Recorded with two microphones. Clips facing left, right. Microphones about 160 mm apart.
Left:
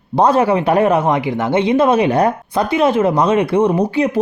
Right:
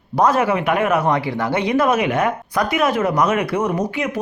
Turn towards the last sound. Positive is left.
turn(degrees=35)  # may be behind; listen again after turning